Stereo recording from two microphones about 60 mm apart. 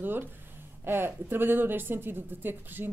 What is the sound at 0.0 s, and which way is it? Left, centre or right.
Speech, right.